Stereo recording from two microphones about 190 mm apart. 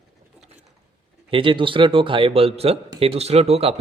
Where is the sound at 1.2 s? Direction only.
25° right (ahead or behind).